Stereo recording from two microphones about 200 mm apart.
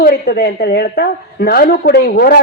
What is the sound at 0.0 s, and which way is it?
A woman's voice, 55° left (ahead or behind).